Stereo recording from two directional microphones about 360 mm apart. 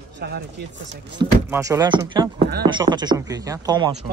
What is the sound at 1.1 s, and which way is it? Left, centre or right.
Speech, centre.